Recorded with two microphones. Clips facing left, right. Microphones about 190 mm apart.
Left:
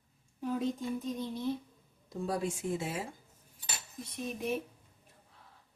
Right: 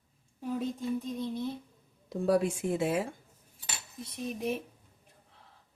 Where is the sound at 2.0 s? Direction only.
65° right (ahead or behind).